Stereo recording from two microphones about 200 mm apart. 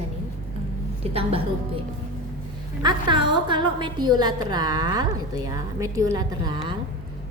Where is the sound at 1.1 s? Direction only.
30° right (ahead or behind).